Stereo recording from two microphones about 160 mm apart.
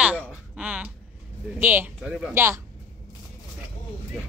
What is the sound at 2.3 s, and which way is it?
Speech, 15° right (ahead or behind).